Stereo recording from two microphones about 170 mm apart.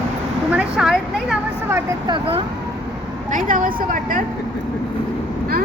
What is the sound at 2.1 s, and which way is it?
Vehicle, 35° right (ahead or behind).